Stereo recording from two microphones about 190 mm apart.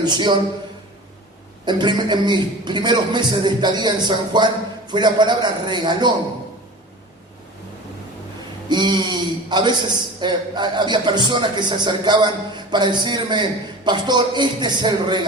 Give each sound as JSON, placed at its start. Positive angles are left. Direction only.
{"t": 0.0, "sound": "a man's voice", "side_deg": -25}
{"t": 1.6, "sound": "a man's voice", "side_deg": -25}
{"t": 8.7, "sound": "a man's voice", "side_deg": -25}